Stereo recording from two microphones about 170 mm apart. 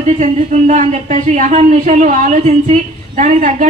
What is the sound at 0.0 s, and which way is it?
Speech, 45° right (ahead or behind).